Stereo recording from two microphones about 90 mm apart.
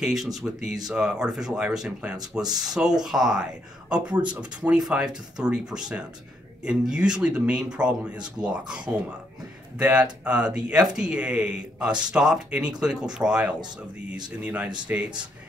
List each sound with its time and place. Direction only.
0.0 s speech: 5° right (ahead or behind); by 15.0 s 20° right (ahead or behind)